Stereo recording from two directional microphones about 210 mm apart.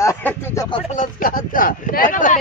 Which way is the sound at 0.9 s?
40° left (ahead or behind).